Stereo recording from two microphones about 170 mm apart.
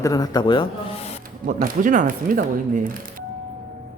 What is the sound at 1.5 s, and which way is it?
Speech, 55° right (ahead or behind).